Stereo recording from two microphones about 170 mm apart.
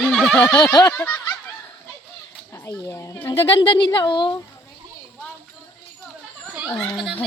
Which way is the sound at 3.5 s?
30° left (ahead or behind).